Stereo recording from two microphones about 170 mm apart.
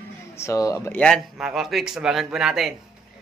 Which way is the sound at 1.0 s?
Centre (ahead or behind).